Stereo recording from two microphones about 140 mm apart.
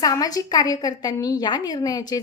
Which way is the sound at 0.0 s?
25° left (ahead or behind).